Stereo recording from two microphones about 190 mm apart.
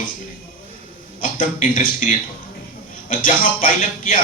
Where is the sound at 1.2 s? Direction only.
40° left (ahead or behind).